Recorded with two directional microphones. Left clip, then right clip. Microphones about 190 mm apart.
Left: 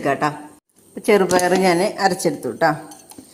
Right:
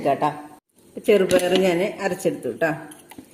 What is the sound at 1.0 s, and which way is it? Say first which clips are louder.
A woman's voice: left 2 dB; 20° left (ahead or behind).